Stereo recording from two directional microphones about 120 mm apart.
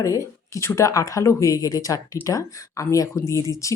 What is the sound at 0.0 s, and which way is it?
Speech, 25° left (ahead or behind).